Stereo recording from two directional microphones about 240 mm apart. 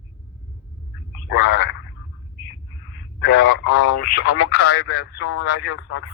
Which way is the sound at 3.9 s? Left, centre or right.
Left.